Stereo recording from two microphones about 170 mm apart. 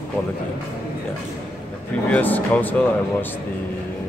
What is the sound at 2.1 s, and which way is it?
Speech, 10° left (ahead or behind).